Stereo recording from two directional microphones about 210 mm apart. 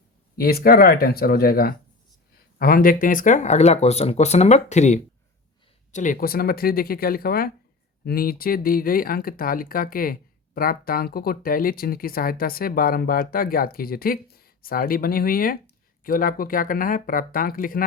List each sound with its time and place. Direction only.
0.3 s speech: 45° left (ahead or behind)